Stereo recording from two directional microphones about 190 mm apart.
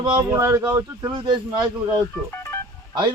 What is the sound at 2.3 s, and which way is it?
Telephone dialing, 10° left (ahead or behind).